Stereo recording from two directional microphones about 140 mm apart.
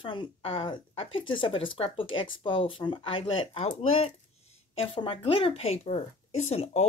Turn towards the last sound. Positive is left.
turn(degrees=50)  # may be behind; listen again after turning